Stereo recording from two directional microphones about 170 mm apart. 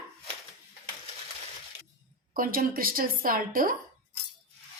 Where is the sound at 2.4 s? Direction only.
55° right (ahead or behind).